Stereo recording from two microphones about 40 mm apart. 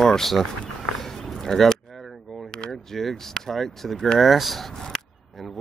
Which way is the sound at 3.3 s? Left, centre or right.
Centre.